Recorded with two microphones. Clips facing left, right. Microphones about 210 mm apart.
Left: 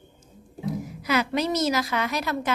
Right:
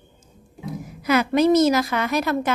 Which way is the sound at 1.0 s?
50° right (ahead or behind).